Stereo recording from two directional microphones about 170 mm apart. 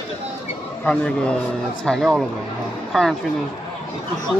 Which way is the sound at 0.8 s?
5° left (ahead or behind).